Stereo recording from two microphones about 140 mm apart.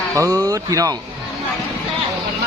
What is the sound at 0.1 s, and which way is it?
Speech, 25° right (ahead or behind).